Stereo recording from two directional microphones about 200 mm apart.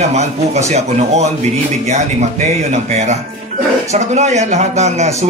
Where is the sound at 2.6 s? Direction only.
35° right (ahead or behind).